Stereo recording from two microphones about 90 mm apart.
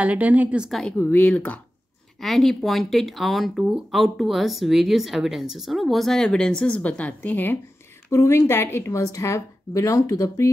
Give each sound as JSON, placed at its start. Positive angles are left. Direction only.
{"t": 0.0, "sound": "a woman's voice", "side_deg": -15}
{"t": 0.7, "sound": "speech", "side_deg": 5}
{"t": 0.9, "sound": "speech", "side_deg": 25}
{"t": 2.1, "sound": "a woman's voice", "side_deg": 5}